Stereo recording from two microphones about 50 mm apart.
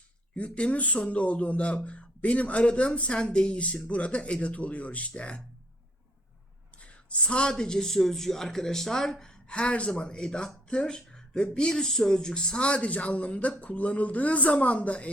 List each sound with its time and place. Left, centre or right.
0.3 s speech: left
6.7 s a sound: left
7.5 s speech: centre; by 15.1 s left